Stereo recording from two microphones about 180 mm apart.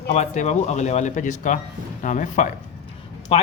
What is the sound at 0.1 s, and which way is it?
Speech, 40° left (ahead or behind).